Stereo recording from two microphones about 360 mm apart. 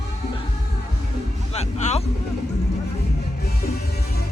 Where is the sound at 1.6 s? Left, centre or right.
Centre.